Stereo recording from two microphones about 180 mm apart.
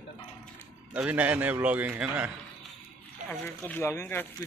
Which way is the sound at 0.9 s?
5° right (ahead or behind).